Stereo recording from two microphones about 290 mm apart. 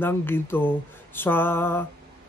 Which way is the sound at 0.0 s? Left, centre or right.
Centre.